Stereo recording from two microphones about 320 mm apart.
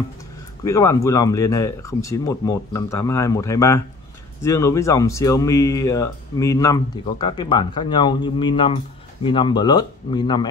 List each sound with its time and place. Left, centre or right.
0.7 s speech: centre